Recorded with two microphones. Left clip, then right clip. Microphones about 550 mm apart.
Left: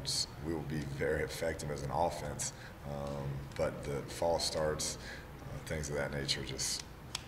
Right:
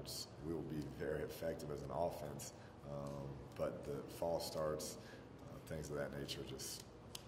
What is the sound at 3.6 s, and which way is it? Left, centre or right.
Speech, left.